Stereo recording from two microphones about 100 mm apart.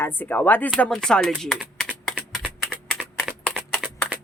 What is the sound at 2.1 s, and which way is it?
Typing, 10° right (ahead or behind).